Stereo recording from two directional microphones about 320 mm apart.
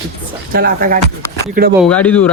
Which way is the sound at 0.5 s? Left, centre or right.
Right.